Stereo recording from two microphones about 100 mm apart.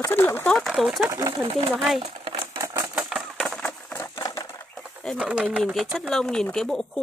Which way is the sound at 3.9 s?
30° left (ahead or behind).